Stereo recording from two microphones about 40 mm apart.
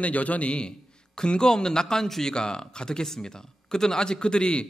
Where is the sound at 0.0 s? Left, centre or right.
Left.